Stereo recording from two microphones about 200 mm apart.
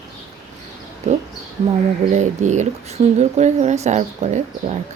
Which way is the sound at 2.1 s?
35° right (ahead or behind).